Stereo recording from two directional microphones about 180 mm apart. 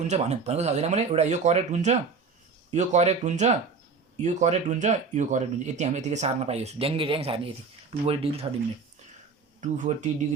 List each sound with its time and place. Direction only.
0.1 s speech: 35° right (ahead or behind)
9.6 s speech: 40° right (ahead or behind)